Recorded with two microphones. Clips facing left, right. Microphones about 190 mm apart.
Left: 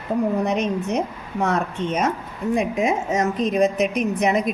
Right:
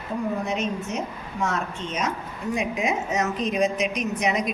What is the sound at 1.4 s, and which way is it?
A woman's voice, 60° left (ahead or behind).